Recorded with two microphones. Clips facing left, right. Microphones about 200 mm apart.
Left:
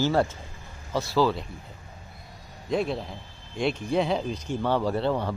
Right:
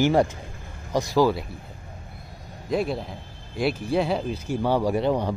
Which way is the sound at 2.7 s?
Centre (ahead or behind).